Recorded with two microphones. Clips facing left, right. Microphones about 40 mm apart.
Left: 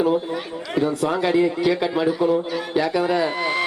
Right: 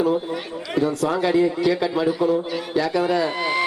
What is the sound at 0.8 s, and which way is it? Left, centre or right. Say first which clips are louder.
Speech: even; centre.